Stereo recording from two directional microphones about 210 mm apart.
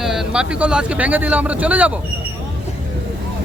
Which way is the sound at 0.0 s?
Centre (ahead or behind).